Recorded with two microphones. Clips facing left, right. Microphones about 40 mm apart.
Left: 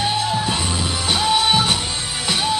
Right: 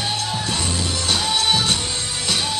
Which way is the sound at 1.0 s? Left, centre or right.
Centre.